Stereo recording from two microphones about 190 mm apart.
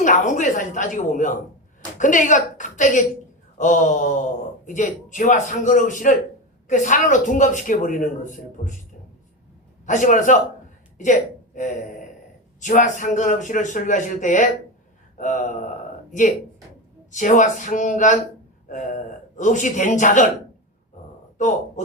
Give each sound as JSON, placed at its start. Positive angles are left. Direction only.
{"t": 0.0, "sound": "speech", "side_deg": 40}
{"t": 9.8, "sound": "speech", "side_deg": 40}
{"t": 10.9, "sound": "a sound", "side_deg": 40}
{"t": 12.5, "sound": "speech", "side_deg": 40}
{"t": 17.1, "sound": "speech", "side_deg": 40}